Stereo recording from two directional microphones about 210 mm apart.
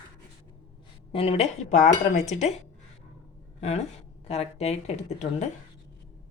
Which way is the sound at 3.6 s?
30° left (ahead or behind).